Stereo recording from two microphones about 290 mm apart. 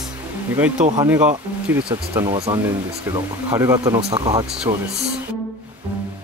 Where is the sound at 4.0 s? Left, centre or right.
Right.